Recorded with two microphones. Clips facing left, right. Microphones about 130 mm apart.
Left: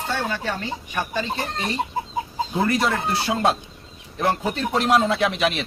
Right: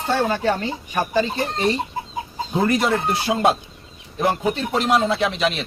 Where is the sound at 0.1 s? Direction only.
45° right (ahead or behind).